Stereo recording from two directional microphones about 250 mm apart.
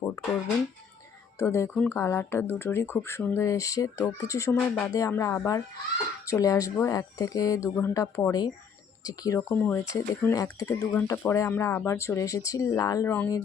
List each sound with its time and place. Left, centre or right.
1.4 s speech: centre